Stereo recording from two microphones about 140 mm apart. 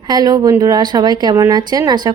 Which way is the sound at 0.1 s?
30° right (ahead or behind).